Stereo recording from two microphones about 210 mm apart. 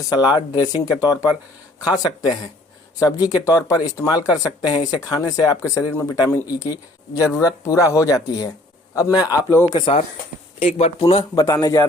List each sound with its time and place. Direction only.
0.1 s a man's voice: 20° left (ahead or behind)
10.6 s a man's voice: 30° left (ahead or behind)